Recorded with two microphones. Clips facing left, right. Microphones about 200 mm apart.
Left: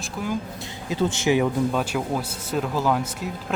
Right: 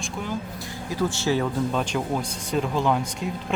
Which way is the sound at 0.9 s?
20° left (ahead or behind).